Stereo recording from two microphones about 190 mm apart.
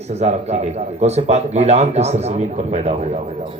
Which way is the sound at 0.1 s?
35° right (ahead or behind).